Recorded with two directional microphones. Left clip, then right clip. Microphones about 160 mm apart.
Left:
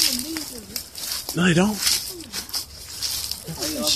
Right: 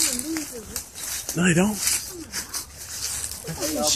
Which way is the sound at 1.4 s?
10° left (ahead or behind).